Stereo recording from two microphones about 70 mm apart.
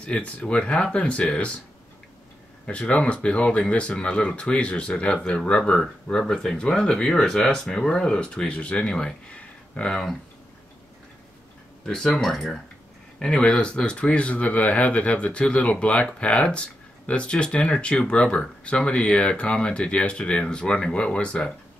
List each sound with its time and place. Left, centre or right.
0.0 s speech: centre
2.6 s speech: centre
11.8 s speech: centre